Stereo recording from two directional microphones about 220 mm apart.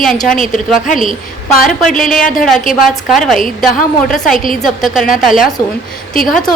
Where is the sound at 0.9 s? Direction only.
35° left (ahead or behind).